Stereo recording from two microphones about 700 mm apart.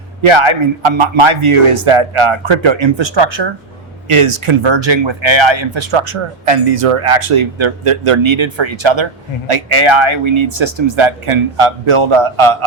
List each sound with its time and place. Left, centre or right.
0.2 s speech: right